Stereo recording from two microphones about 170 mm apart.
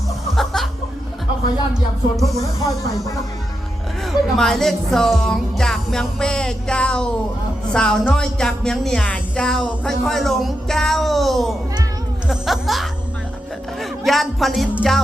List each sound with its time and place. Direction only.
0.3 s music: centre (ahead or behind)
2.1 s speech: centre (ahead or behind)
2.4 s speech: 20° left (ahead or behind)
4.0 s speech: 5° left (ahead or behind)